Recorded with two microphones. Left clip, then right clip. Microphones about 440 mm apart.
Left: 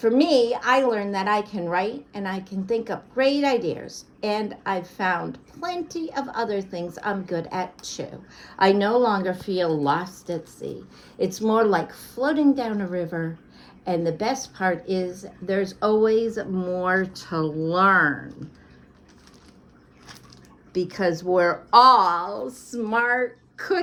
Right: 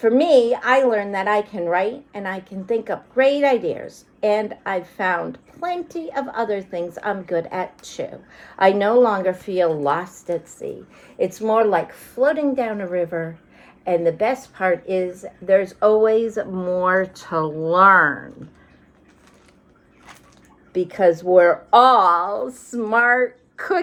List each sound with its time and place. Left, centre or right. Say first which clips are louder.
0.0 s a woman's voice: right 4 dB; centre
20.7 s a woman's voice: right 7 dB; centre